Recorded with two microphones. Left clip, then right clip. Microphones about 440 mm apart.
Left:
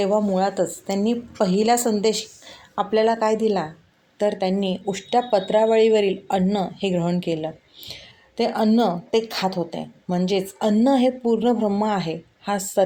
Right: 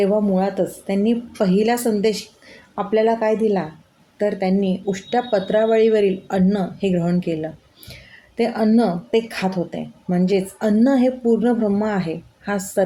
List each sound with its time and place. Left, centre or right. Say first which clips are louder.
0.0 s a woman's voice: right 1 dB; right